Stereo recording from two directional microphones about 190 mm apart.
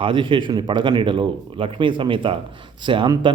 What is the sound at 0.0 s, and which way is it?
Speech, 25° right (ahead or behind).